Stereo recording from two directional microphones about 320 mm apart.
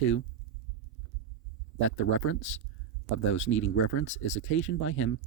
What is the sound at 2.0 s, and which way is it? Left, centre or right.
Speech, left.